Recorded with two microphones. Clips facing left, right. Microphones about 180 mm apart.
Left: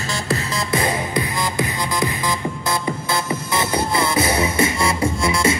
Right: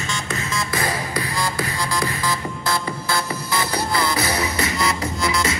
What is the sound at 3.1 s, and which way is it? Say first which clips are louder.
Music: even; 25° left (ahead or behind).